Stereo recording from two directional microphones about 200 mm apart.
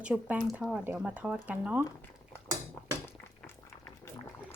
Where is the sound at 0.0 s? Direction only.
5° right (ahead or behind).